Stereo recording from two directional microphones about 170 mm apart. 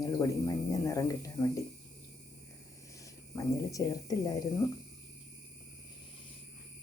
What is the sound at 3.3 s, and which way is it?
Speech, 20° left (ahead or behind).